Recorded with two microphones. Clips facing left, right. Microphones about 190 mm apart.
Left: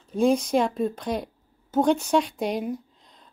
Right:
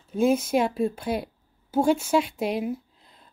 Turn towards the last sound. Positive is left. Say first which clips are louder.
# left 1 dB
turn(degrees=-5)  # may be behind; listen again after turning